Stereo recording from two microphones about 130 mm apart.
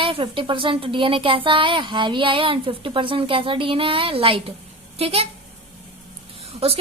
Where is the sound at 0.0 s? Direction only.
45° right (ahead or behind).